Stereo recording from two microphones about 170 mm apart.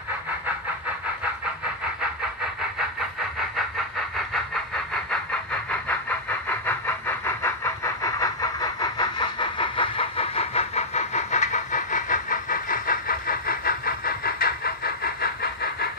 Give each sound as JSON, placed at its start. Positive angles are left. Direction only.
{"t": 3.3, "sound": "vehicle", "side_deg": 0}